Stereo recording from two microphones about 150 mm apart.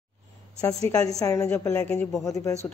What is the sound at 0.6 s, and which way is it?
A woman's voice, 25° left (ahead or behind).